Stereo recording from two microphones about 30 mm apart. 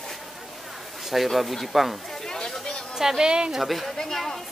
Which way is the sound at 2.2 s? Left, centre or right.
Centre.